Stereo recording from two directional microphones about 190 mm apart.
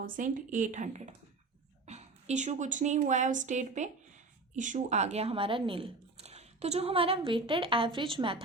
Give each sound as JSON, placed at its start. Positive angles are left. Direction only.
{"t": 0.0, "sound": "a woman's voice", "side_deg": -45}